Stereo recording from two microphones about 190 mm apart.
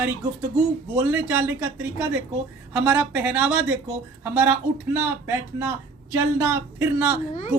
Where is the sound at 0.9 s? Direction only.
10° right (ahead or behind).